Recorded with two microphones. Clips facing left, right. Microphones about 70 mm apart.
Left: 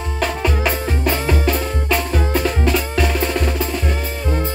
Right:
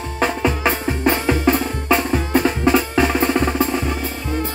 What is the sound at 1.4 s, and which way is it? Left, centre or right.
Drum, right.